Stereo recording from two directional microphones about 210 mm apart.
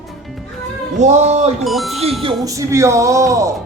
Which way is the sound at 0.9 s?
35° right (ahead or behind).